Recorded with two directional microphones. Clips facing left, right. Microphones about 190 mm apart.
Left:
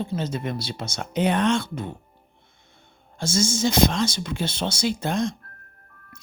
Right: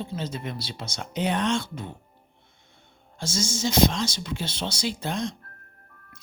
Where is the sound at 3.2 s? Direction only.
50° left (ahead or behind).